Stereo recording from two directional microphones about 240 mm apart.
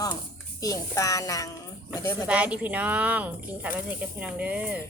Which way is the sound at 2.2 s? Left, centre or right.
Centre.